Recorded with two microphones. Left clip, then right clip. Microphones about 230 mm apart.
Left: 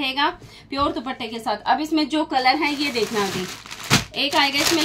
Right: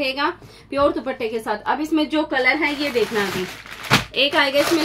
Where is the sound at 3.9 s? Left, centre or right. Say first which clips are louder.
Right 3 dB; left.